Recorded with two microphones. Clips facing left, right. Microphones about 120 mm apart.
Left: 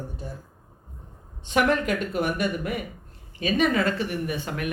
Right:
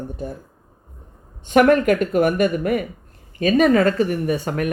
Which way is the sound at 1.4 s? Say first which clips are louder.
Right 8 dB; 55° right (ahead or behind).